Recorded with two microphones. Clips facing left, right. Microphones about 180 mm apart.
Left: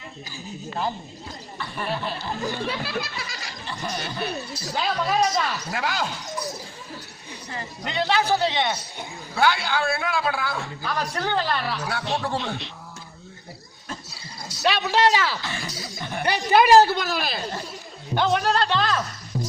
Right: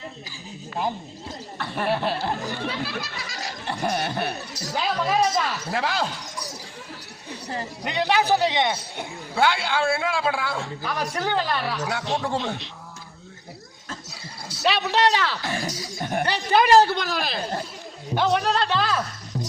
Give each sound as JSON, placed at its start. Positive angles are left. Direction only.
{"t": 1.5, "sound": "chuckle", "side_deg": -65}
{"t": 2.6, "sound": "a sound", "side_deg": 60}
{"t": 3.7, "sound": "chuckle", "side_deg": -60}
{"t": 4.8, "sound": "a man's voice", "side_deg": -5}
{"t": 5.6, "sound": "speech", "side_deg": -30}
{"t": 7.9, "sound": "a man's voice", "side_deg": -15}
{"t": 10.8, "sound": "speech", "side_deg": -15}
{"t": 14.6, "sound": "speech", "side_deg": 0}
{"t": 15.4, "sound": "a sound", "side_deg": -45}
{"t": 16.2, "sound": "a woman's voice", "side_deg": 10}